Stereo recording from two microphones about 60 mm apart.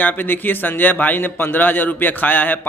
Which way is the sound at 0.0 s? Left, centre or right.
Left.